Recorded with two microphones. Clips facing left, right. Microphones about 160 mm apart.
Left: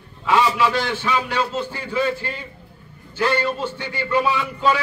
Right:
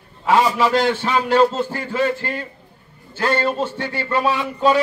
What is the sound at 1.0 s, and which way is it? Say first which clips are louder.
Speech: right 7 dB; 45° right (ahead or behind).